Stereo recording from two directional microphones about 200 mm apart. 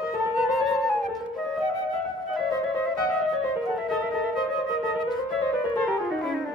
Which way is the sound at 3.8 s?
Centre (ahead or behind).